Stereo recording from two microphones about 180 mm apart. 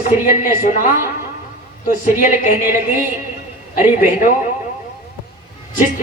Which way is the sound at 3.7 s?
40° left (ahead or behind).